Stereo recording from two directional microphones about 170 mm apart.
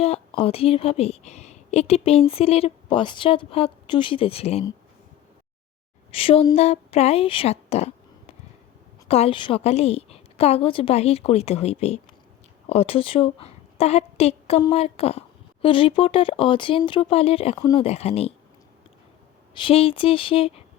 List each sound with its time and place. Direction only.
0.0 s a woman's voice: 35° left (ahead or behind)
6.1 s a woman's voice: 35° left (ahead or behind)
19.5 s a woman's voice: 30° left (ahead or behind)